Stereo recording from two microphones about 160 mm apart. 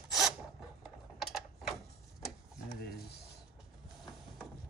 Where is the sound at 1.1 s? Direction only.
Centre (ahead or behind).